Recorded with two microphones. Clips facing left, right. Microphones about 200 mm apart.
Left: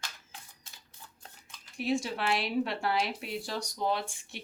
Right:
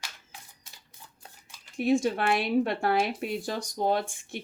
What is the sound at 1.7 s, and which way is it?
Speech, 50° right (ahead or behind).